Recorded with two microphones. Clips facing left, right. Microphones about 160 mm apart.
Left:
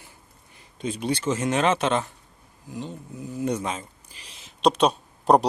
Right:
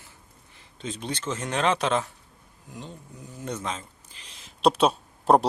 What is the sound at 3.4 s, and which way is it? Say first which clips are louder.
Speech: left 6 dB; 10° left (ahead or behind).